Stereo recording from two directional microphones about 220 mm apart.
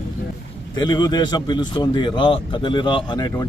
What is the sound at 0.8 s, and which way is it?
A man's voice, 20° left (ahead or behind).